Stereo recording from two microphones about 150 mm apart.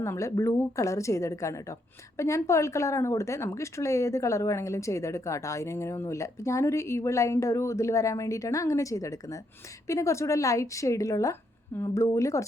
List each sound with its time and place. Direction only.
0.0 s a woman's voice: 20° left (ahead or behind)